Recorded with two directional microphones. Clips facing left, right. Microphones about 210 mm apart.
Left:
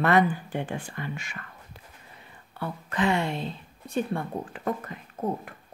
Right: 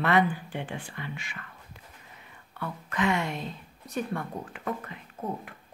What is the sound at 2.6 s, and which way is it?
Speech, 30° left (ahead or behind).